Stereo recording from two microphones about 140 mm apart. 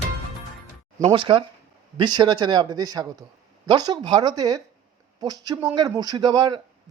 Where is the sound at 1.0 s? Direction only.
35° right (ahead or behind).